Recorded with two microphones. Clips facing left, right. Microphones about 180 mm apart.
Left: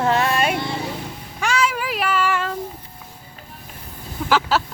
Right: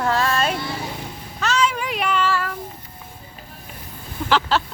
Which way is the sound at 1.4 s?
10° left (ahead or behind).